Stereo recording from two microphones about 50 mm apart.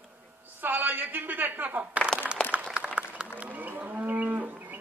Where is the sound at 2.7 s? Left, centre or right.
Right.